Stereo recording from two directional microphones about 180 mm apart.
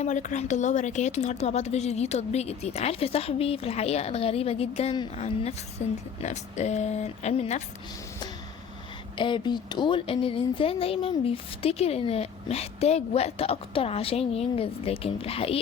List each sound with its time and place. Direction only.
0.0 s speech: 45° left (ahead or behind)
9.1 s speech: 25° left (ahead or behind)